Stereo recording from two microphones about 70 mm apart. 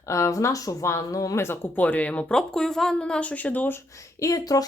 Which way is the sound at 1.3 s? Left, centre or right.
Left.